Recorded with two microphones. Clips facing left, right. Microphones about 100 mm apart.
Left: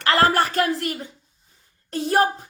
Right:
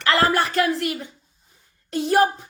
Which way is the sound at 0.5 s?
40° left (ahead or behind).